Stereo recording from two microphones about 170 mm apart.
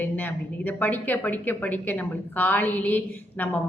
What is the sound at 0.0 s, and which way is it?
A woman's voice, 10° left (ahead or behind).